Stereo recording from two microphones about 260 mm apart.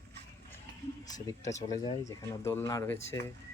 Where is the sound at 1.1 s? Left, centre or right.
Centre.